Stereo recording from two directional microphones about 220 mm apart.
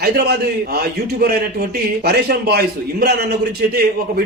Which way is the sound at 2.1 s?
45° right (ahead or behind).